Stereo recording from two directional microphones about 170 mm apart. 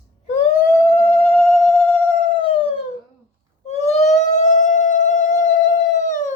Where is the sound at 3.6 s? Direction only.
40° left (ahead or behind).